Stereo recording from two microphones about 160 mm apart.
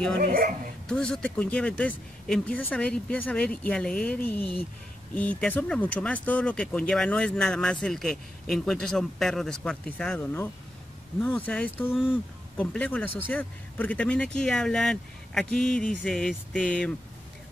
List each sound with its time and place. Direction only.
0.2 s speech: 65° right (ahead or behind)
0.8 s speech: 5° left (ahead or behind)